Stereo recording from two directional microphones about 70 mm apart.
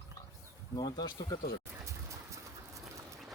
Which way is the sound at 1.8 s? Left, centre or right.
Right.